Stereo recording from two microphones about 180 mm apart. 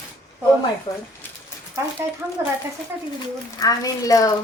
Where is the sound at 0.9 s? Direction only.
30° left (ahead or behind).